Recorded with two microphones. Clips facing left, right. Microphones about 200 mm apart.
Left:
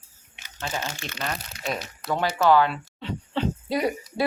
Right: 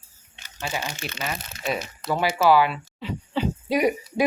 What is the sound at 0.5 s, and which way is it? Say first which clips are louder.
Speech: right 1 dB; 15° right (ahead or behind).